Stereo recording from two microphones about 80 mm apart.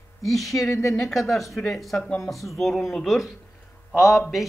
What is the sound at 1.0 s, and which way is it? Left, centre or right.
A man's voice, centre.